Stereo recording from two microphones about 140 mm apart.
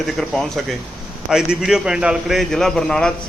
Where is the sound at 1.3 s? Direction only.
5° right (ahead or behind).